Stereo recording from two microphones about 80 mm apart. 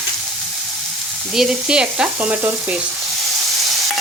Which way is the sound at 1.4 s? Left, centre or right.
Centre.